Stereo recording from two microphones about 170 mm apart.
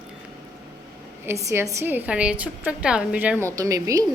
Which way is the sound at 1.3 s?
15° right (ahead or behind).